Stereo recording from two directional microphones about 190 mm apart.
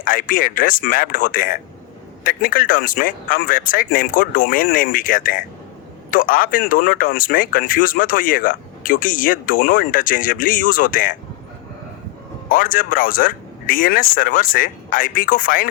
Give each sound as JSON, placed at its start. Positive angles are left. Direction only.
{"t": 0.0, "sound": "speech", "side_deg": 45}
{"t": 12.5, "sound": "speech", "side_deg": 45}